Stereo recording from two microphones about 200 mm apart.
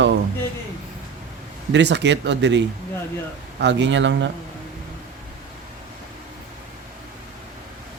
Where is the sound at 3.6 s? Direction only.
60° right (ahead or behind).